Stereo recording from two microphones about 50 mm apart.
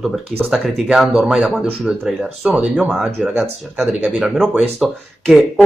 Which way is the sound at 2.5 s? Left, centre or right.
Right.